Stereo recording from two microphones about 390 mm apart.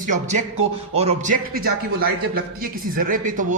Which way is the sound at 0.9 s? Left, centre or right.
Centre.